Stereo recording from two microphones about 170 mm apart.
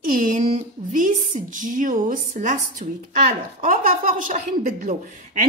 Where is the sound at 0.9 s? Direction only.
50° right (ahead or behind).